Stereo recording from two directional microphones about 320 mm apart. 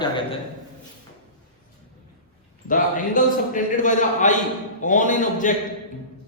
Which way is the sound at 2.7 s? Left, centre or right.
Left.